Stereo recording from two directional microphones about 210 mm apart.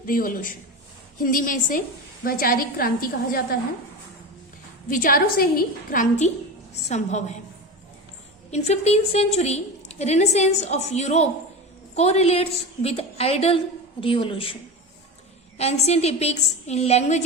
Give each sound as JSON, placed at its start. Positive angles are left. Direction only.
{"t": 0.0, "sound": "a woman's voice", "side_deg": 40}
{"t": 4.9, "sound": "a woman's voice", "side_deg": 40}
{"t": 8.4, "sound": "a woman's voice", "side_deg": 30}
{"t": 15.5, "sound": "a woman's voice", "side_deg": 30}